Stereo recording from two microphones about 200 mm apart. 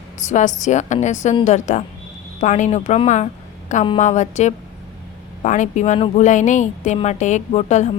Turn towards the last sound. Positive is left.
turn(degrees=35)  # may be behind; listen again after turning